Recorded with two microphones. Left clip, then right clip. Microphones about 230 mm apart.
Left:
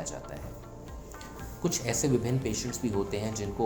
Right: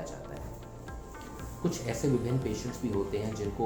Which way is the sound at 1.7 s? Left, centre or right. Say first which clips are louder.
Left 3 dB; left.